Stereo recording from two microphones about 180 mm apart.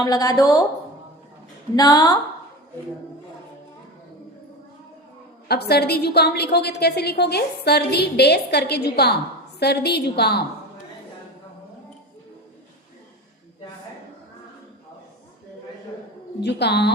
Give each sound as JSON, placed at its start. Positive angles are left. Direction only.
{"t": 0.0, "sound": "a woman's voice", "side_deg": 20}
{"t": 1.7, "sound": "a woman's voice", "side_deg": 20}
{"t": 5.5, "sound": "a woman's voice", "side_deg": 65}
{"t": 16.4, "sound": "a woman's voice", "side_deg": 70}